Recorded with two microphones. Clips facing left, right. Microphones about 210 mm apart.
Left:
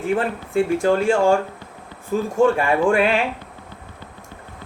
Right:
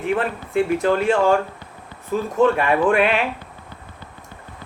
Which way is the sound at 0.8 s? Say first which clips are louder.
Left 2 dB; 30° left (ahead or behind).